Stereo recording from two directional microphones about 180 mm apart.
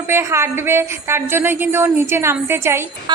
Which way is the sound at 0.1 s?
15° right (ahead or behind).